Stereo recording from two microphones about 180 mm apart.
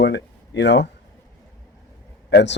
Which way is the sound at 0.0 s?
75° left (ahead or behind).